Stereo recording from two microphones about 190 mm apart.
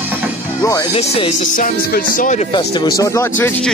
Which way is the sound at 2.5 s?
20° left (ahead or behind).